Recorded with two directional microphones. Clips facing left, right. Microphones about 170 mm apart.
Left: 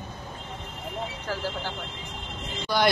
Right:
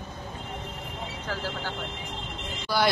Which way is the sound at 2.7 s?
5° right (ahead or behind).